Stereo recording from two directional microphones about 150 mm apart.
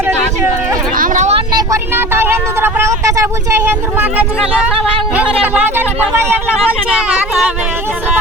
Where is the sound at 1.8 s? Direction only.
15° right (ahead or behind).